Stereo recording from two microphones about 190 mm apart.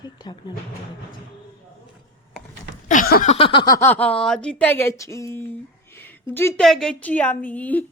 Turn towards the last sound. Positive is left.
turn(degrees=10)  # may be behind; listen again after turning